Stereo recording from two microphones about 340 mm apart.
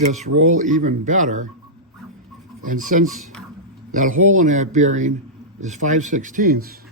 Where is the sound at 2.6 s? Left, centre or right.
Right.